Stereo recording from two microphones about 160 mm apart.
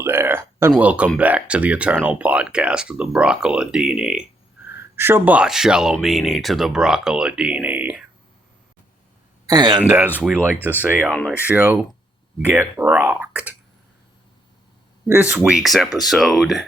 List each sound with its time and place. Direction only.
0.0 s a sound: 15° right (ahead or behind)
0.8 s speech: 10° right (ahead or behind)
9.5 s speech: 25° right (ahead or behind)
10.2 s speech: 10° right (ahead or behind)
11.1 s speech: 5° left (ahead or behind)
11.3 s speech: 10° right (ahead or behind)
15.0 s speech: 10° right (ahead or behind)